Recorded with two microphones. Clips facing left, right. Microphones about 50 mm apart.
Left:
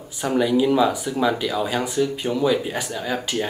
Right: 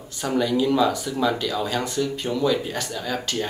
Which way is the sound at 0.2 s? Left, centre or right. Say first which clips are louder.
Left 3 dB; centre.